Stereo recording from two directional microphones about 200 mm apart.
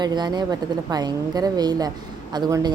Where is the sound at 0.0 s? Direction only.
20° right (ahead or behind).